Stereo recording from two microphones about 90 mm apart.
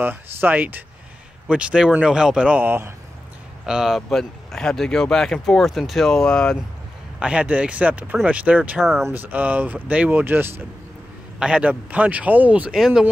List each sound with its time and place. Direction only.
0.0 s a man's voice: 20° right (ahead or behind)
3.6 s speech: 5° right (ahead or behind)
7.2 s a man's voice: 10° right (ahead or behind)
11.3 s a man's voice: 10° right (ahead or behind)
12.7 s speech: 5° right (ahead or behind)